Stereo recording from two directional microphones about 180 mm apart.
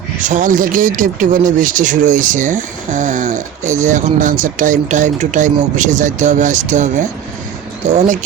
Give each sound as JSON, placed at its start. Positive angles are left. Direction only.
{"t": 0.2, "sound": "speech", "side_deg": -45}